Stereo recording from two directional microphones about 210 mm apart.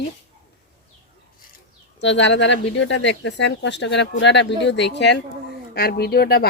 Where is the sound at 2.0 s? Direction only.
60° left (ahead or behind).